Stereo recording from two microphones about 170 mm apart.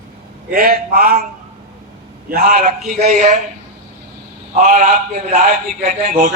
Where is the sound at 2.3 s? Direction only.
55° right (ahead or behind).